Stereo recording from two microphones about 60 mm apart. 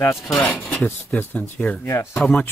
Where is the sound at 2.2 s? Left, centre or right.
Centre.